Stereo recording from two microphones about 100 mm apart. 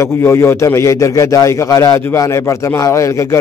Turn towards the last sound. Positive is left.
turn(degrees=30)  # may be behind; listen again after turning